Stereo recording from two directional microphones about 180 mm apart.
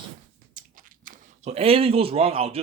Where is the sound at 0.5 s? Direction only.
50° right (ahead or behind).